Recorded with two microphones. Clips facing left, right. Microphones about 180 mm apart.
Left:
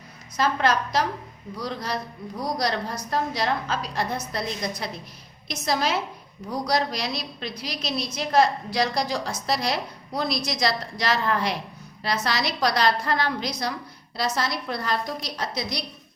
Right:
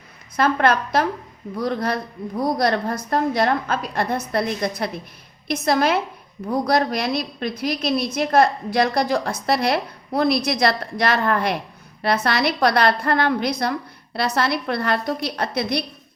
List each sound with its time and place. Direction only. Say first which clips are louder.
0.3 s a woman's voice: right 4 dB; 60° right (ahead or behind)